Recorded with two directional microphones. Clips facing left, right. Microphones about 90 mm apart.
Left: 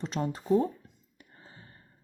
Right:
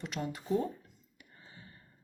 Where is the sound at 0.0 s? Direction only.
35° left (ahead or behind).